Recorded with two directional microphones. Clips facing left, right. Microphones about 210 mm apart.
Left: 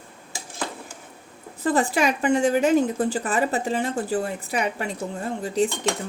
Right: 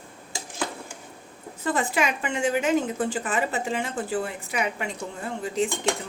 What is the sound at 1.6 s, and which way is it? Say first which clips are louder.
A woman's voice: left 4 dB; 35° left (ahead or behind).